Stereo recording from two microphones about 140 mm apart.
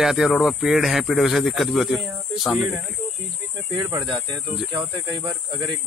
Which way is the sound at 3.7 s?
35° right (ahead or behind).